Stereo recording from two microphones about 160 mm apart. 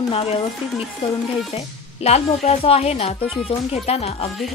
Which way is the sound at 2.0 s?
40° left (ahead or behind).